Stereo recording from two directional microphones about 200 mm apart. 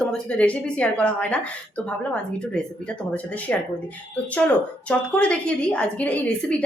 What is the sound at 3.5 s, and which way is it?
A woman's voice, 5° left (ahead or behind).